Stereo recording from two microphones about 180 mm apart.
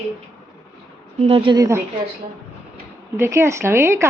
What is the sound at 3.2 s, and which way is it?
Speech, 15° right (ahead or behind).